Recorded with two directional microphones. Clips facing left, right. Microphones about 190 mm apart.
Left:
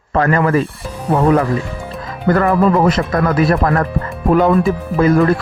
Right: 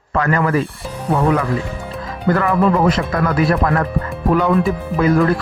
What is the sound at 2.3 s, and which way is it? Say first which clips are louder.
Speech: left 3 dB; 40° left (ahead or behind).